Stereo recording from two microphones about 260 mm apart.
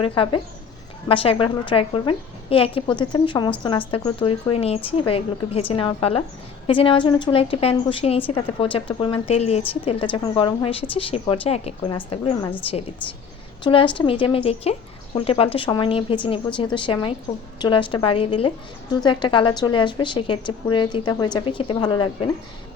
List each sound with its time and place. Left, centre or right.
0.2 s a woman's voice: centre
13.7 s a woman's voice: centre